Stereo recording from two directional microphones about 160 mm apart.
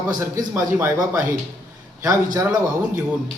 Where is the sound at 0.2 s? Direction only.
15° right (ahead or behind).